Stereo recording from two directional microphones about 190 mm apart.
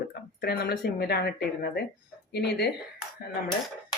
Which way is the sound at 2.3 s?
60° left (ahead or behind).